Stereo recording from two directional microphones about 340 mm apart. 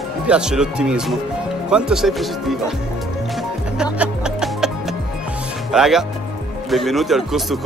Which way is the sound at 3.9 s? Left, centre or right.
Centre.